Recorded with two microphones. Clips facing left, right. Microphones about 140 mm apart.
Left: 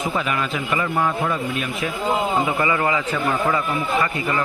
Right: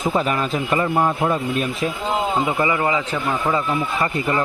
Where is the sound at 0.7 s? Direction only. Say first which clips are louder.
Right 3 dB; 25° right (ahead or behind).